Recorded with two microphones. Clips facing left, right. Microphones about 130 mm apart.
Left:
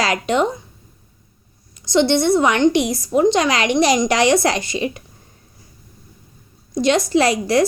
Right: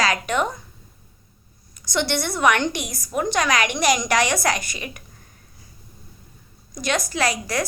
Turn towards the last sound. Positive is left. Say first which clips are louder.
# left 8 dB
turn(degrees=25)  # may be behind; listen again after turning